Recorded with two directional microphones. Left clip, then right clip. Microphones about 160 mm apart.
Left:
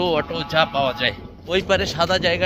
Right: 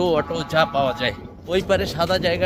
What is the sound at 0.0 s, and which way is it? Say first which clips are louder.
Speech: right 1 dB; 15° right (ahead or behind).